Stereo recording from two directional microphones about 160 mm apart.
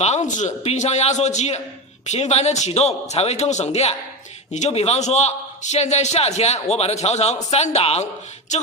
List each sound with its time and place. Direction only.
0.0 s a man's voice: 45° left (ahead or behind)